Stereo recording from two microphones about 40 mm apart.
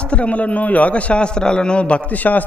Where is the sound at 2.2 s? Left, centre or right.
Left.